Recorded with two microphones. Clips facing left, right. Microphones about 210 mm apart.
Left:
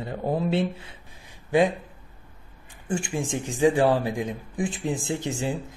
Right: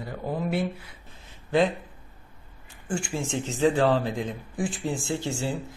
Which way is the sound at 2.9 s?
20° left (ahead or behind).